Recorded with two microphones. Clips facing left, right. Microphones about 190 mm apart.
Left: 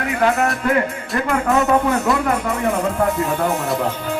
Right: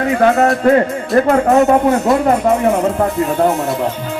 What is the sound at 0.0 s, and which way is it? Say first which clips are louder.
Music: right 6 dB; 35° right (ahead or behind).